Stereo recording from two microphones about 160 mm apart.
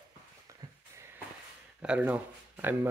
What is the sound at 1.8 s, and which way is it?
Speech, 10° right (ahead or behind).